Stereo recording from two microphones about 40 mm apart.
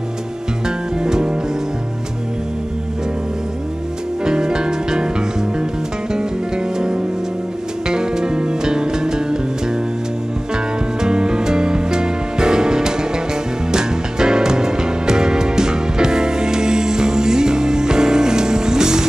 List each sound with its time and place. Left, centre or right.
0.7 s music: centre
4.2 s music: centre
7.9 s music: centre
10.5 s music: centre